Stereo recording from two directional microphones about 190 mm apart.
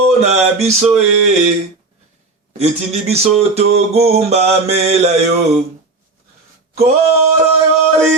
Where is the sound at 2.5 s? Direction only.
35° right (ahead or behind).